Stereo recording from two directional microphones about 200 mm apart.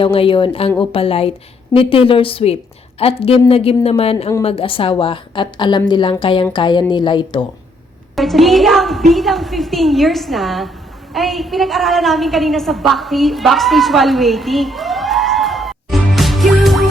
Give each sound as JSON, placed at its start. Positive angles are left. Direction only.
{"t": 0.0, "sound": "a woman's voice", "side_deg": 25}
{"t": 8.1, "sound": "a woman's voice", "side_deg": 0}